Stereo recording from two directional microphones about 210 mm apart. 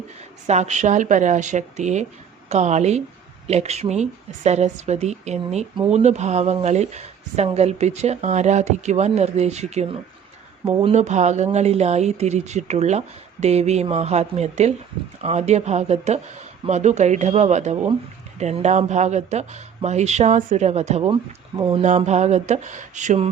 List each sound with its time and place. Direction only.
0.4 s speech: 30° right (ahead or behind)